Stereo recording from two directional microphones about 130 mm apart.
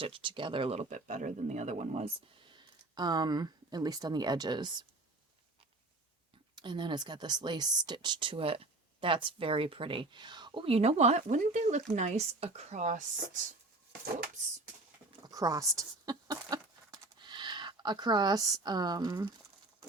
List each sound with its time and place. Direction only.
0.0 s speech: 40° right (ahead or behind)
2.5 s speech: 35° right (ahead or behind)
6.6 s speech: 35° right (ahead or behind); by 13.0 s 70° right (ahead or behind)
15.2 s a sound: 25° right (ahead or behind)